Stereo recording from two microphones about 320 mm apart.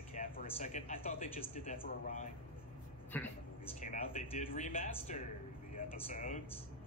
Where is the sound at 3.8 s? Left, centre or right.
Left.